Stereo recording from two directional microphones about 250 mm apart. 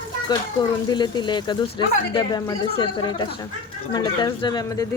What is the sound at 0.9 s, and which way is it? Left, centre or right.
Speech, centre.